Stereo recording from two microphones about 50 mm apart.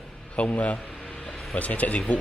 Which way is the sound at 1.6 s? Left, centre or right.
Left.